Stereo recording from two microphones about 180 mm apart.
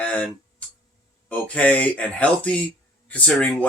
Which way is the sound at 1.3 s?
10° left (ahead or behind).